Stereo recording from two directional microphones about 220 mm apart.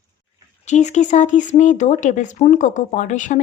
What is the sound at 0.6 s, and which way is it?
Speech, 30° left (ahead or behind).